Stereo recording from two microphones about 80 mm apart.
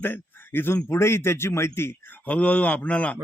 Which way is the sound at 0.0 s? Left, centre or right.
Left.